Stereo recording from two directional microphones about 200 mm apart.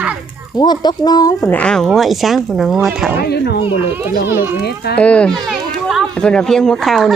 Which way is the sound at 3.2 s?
55° left (ahead or behind).